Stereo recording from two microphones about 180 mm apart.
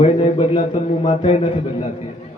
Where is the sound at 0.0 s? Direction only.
30° left (ahead or behind).